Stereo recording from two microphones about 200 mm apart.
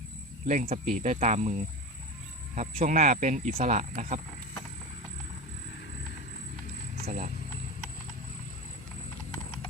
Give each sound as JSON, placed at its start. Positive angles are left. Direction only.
{"t": 0.4, "sound": "speech", "side_deg": -35}
{"t": 7.0, "sound": "speech", "side_deg": -40}